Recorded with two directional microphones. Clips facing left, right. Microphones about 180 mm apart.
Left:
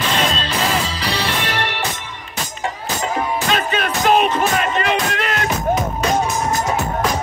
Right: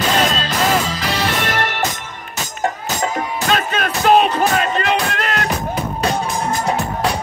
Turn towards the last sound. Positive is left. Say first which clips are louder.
# right 1 dB
turn(degrees=-40)  # may be behind; listen again after turning